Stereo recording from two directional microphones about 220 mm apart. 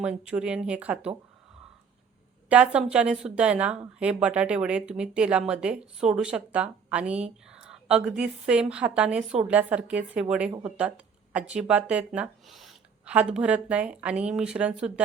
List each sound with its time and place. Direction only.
0.0 s a woman's voice: 5° right (ahead or behind)
2.5 s a woman's voice: 5° right (ahead or behind)